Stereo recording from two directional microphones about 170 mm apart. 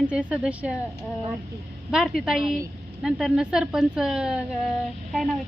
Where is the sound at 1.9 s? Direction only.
Centre (ahead or behind).